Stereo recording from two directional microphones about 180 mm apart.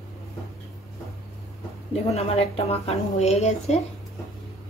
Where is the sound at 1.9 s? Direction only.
35° left (ahead or behind).